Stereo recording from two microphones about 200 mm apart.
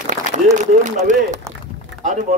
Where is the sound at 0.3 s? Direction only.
40° right (ahead or behind).